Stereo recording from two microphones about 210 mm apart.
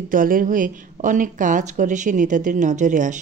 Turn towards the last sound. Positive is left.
turn(degrees=-35)  # may be behind; listen again after turning